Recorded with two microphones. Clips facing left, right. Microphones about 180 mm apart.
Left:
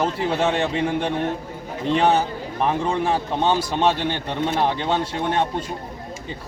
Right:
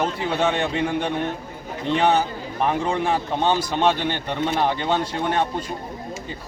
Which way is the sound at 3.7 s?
5° left (ahead or behind).